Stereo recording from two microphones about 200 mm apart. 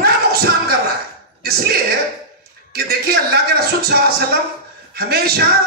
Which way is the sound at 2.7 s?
50° right (ahead or behind).